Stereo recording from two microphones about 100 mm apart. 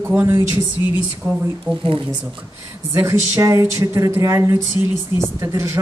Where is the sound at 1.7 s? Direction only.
20° right (ahead or behind).